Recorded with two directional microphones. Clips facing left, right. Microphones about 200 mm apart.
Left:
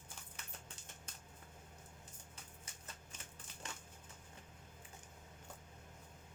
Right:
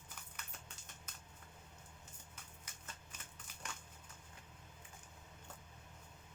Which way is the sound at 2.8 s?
25° left (ahead or behind).